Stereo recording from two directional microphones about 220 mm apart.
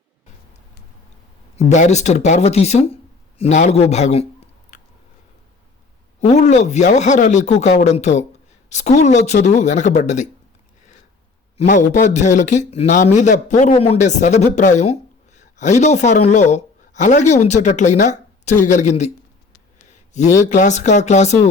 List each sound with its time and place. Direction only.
1.5 s a man's voice: 30° left (ahead or behind)
4.7 s a sound: 35° left (ahead or behind)
6.1 s a man's voice: 30° left (ahead or behind)
11.5 s a man's voice: 35° left (ahead or behind)
20.5 s a man's voice: 35° left (ahead or behind)